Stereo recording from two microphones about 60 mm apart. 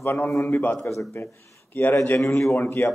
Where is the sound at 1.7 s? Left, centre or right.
Left.